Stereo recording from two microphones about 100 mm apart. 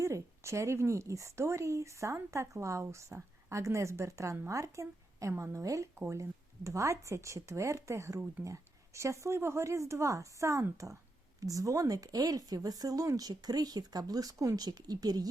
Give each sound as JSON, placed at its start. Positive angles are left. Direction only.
{"t": 0.0, "sound": "a woman's voice", "side_deg": -30}